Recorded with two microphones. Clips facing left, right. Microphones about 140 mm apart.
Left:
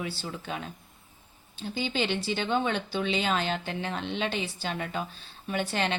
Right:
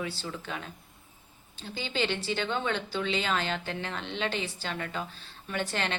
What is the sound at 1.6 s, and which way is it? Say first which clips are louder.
A woman's voice: left 2 dB; 15° left (ahead or behind).